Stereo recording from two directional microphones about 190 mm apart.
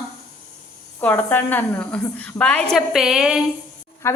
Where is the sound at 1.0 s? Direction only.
10° left (ahead or behind).